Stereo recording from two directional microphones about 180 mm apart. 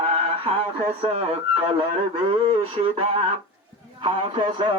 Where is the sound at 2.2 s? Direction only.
30° right (ahead or behind).